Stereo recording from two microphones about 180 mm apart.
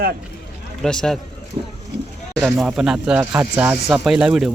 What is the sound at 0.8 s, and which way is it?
Speech, 5° left (ahead or behind).